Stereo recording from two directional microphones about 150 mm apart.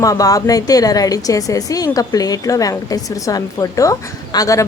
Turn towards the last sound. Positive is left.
turn(degrees=20)  # may be behind; listen again after turning